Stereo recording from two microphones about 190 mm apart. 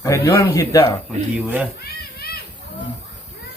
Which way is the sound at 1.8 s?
55° left (ahead or behind).